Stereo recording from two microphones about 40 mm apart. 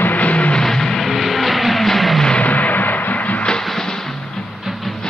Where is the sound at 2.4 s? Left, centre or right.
Left.